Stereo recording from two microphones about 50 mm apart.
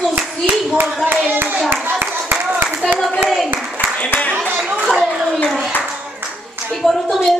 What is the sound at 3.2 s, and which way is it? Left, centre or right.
Speech, centre.